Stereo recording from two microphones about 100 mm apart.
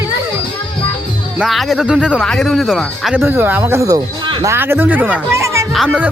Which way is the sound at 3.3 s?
20° right (ahead or behind).